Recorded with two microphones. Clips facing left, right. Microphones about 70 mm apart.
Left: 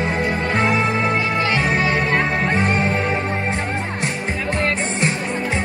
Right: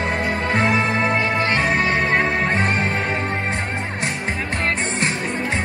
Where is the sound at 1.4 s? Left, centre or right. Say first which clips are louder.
Even; right.